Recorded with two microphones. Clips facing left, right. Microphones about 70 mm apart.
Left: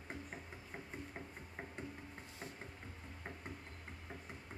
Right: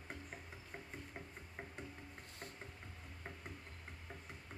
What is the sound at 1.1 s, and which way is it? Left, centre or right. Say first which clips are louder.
Music: left 2 dB; centre.